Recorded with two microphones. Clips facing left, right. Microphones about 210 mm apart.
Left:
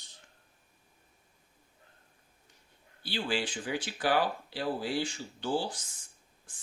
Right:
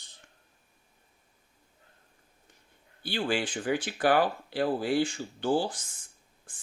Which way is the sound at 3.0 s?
50° right (ahead or behind).